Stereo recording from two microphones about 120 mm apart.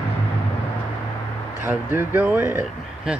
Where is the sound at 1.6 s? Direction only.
15° right (ahead or behind).